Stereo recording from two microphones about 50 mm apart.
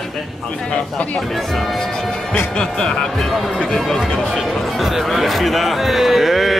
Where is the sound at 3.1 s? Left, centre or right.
Centre.